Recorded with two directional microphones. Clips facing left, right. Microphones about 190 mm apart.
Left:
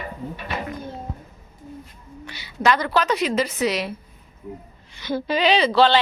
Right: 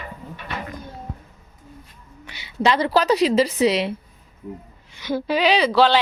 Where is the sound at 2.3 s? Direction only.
20° right (ahead or behind).